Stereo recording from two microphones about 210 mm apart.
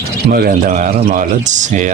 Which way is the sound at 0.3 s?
45° right (ahead or behind).